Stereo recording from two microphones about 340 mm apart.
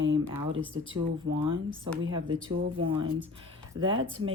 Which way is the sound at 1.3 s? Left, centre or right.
Centre.